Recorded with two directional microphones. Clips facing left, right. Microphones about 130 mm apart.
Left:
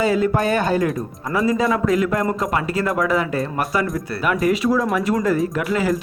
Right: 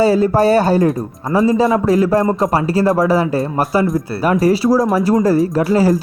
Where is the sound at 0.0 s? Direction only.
35° right (ahead or behind).